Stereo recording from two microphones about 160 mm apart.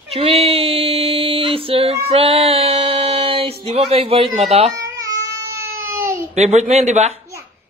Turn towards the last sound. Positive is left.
turn(degrees=-45)  # may be behind; listen again after turning